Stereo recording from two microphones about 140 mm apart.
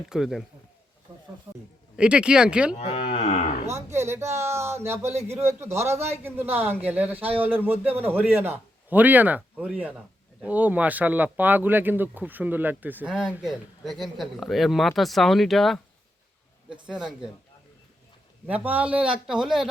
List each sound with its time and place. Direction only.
0.1 s speech: centre (ahead or behind)
1.1 s snake: 30° right (ahead or behind)
2.0 s speech: 5° right (ahead or behind)
2.7 s moo: 40° left (ahead or behind)
3.7 s speech: 20° right (ahead or behind); by 15.8 s centre (ahead or behind)
16.8 s speech: 5° right (ahead or behind)
18.4 s speech: 10° right (ahead or behind)